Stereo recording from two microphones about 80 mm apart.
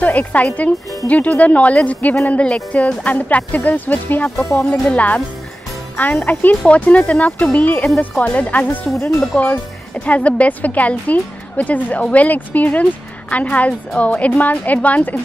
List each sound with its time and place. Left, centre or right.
0.0 s a woman's voice: centre
4.4 s speech: left
4.6 s speech: centre
6.2 s a woman's voice: left